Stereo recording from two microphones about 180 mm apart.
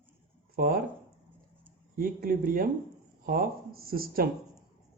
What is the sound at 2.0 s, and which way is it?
Speech, 55° right (ahead or behind).